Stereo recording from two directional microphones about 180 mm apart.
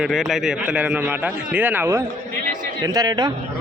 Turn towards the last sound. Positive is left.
turn(degrees=-20)  # may be behind; listen again after turning